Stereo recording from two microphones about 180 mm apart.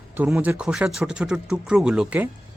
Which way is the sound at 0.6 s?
5° right (ahead or behind).